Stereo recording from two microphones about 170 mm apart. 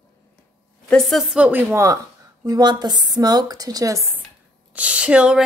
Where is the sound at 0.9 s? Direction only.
Centre (ahead or behind); by 4.1 s 20° right (ahead or behind).